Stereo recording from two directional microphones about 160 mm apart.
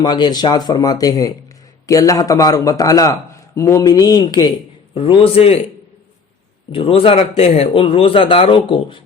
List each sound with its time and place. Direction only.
0.0 s a man's voice: 25° left (ahead or behind)
6.7 s a man's voice: 35° left (ahead or behind)